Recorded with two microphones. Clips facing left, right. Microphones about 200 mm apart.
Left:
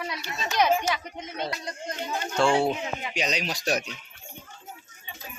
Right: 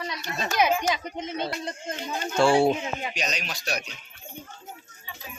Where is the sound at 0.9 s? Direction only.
25° right (ahead or behind).